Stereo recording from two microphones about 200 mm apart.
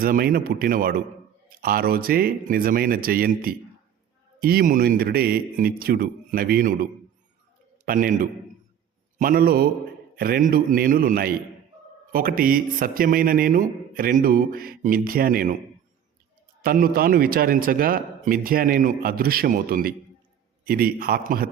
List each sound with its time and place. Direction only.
0.0 s a man's voice: 45° right (ahead or behind)
7.9 s a man's voice: 40° right (ahead or behind)
16.6 s a man's voice: 45° right (ahead or behind)